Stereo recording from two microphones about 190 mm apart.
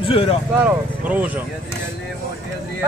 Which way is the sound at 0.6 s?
10° right (ahead or behind).